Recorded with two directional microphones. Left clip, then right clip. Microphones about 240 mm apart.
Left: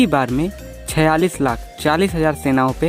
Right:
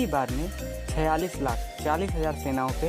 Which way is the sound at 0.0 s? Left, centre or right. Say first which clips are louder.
Left 10 dB; left.